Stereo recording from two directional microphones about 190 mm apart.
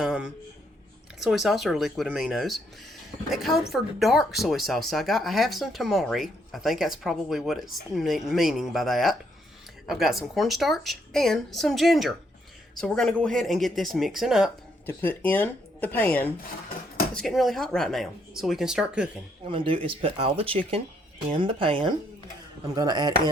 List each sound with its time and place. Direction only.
0.0 s a sound: centre (ahead or behind)
1.2 s speech: centre (ahead or behind)
14.8 s speech: 10° left (ahead or behind)
19.5 s speech: 25° right (ahead or behind)